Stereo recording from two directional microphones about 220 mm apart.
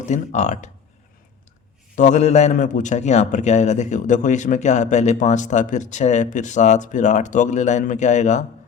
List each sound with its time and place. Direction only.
0.0 s a man's voice: 35° left (ahead or behind)
2.0 s a man's voice: 30° left (ahead or behind)